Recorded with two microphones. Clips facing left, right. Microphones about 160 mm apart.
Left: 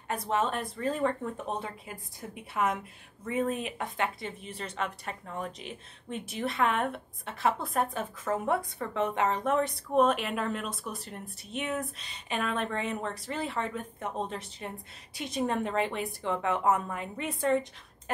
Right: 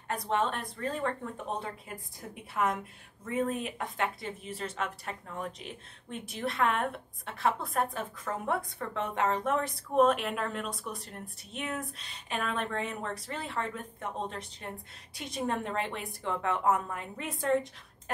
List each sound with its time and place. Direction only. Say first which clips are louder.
0.1 s speech: left 1 dB; 5° left (ahead or behind)
2.5 s speech: left 1 dB; centre (ahead or behind)